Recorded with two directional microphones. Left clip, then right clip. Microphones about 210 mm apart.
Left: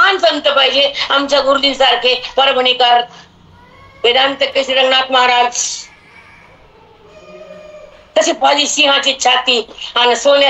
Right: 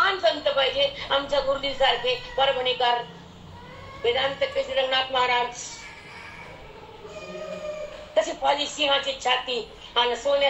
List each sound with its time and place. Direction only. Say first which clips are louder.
0.0 s a woman's voice: left 11 dB; 45° left (ahead or behind)
4.0 s a woman's voice: left 12 dB; 45° left (ahead or behind)
8.1 s a woman's voice: left 11 dB; 45° left (ahead or behind)